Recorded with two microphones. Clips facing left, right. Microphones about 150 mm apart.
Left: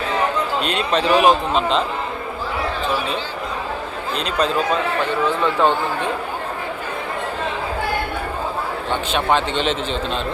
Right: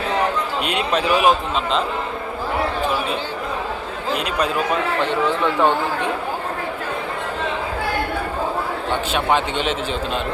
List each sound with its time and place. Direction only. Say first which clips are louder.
0.6 s a man's voice: right 1 dB; 10° right (ahead or behind)
4.1 s a man's voice: left 1 dB; 10° right (ahead or behind)
9.1 s a man's voice: left 1 dB; 10° right (ahead or behind)